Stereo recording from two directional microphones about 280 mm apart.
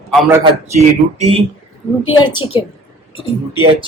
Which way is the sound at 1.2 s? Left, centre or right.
Centre.